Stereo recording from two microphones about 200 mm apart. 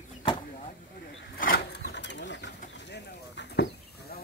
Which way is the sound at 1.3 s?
50° left (ahead or behind).